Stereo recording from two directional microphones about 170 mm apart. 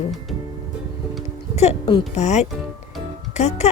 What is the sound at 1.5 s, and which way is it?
Speech, 40° left (ahead or behind).